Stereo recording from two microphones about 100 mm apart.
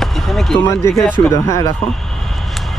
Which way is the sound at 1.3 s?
30° left (ahead or behind).